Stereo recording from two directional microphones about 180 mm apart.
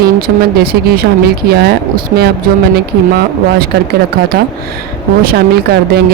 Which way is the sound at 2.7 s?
60° right (ahead or behind).